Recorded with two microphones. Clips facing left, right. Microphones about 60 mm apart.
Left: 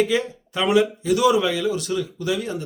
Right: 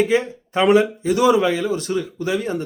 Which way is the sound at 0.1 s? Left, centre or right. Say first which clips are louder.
Right 4 dB; right.